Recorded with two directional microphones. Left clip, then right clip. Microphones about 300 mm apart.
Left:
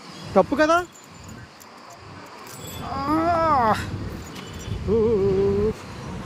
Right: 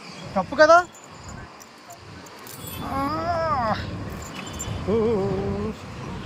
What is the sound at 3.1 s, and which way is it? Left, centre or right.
Baby cry, centre.